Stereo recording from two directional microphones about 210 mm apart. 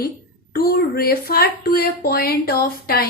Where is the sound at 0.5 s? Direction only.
45° left (ahead or behind).